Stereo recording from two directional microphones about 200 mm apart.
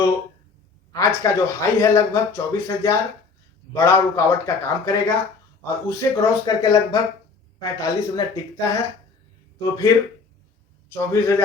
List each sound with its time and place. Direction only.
0.9 s speech: 15° left (ahead or behind)
10.9 s speech: 10° left (ahead or behind)